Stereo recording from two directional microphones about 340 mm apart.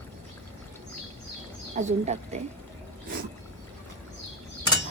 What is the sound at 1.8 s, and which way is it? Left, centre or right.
Speech, centre.